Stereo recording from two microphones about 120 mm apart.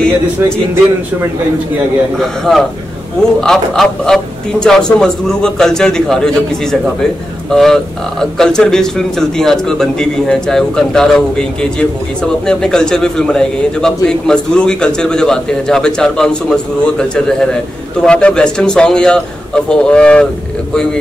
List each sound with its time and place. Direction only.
0.4 s a man's voice: 20° right (ahead or behind)
2.1 s a man's voice: 5° left (ahead or behind)